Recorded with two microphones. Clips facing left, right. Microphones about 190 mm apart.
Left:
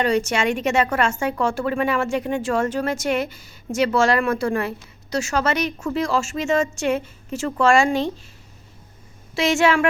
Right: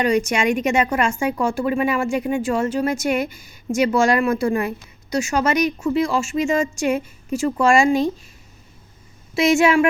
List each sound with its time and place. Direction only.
0.0 s speech: 15° right (ahead or behind)
9.3 s speech: 15° right (ahead or behind)